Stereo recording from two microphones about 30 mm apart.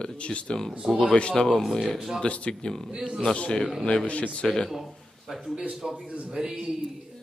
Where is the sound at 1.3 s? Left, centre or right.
Centre.